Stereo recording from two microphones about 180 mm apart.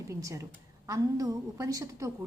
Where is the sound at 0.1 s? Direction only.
15° right (ahead or behind).